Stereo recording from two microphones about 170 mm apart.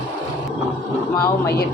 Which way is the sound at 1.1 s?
20° left (ahead or behind).